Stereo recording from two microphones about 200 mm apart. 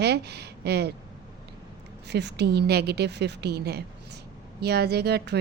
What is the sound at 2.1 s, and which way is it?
A woman's voice, 60° right (ahead or behind).